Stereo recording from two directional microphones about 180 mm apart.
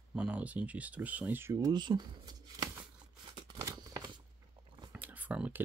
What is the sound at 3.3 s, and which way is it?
Scissors, 20° right (ahead or behind).